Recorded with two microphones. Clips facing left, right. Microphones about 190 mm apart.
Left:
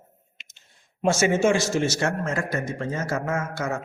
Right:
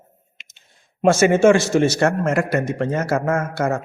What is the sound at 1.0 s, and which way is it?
A man's voice, 60° right (ahead or behind).